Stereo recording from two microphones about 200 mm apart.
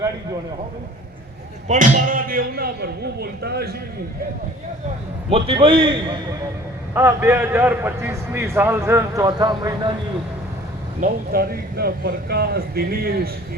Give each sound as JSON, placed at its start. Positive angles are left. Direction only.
{"t": 1.6, "sound": "speech", "side_deg": -40}
{"t": 5.3, "sound": "a man's voice", "side_deg": -25}
{"t": 6.9, "sound": "a man's voice", "side_deg": -10}
{"t": 11.0, "sound": "speech", "side_deg": -50}